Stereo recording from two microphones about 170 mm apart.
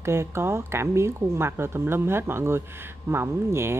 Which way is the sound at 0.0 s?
15° right (ahead or behind).